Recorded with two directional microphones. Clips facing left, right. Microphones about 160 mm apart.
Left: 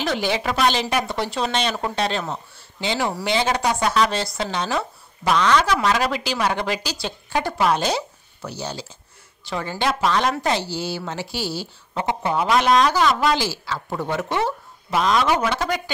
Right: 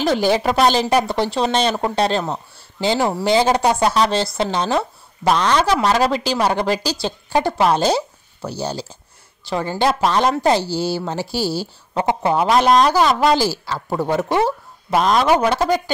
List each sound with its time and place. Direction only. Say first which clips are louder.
0.0 s speech: right 6 dB; 40° right (ahead or behind)